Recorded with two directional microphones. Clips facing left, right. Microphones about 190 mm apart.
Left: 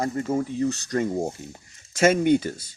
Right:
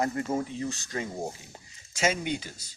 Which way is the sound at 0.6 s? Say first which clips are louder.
Left 9 dB; 50° left (ahead or behind).